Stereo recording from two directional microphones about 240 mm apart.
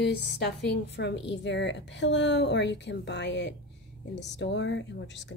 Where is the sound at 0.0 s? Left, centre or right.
Left.